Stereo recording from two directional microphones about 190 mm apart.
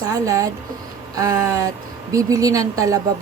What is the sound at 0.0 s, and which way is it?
A woman's voice, 20° right (ahead or behind).